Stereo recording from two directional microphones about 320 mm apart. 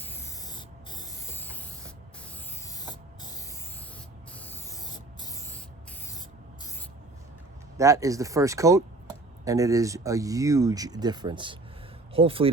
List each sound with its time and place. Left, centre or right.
0.0 s spray: centre
7.8 s speech: centre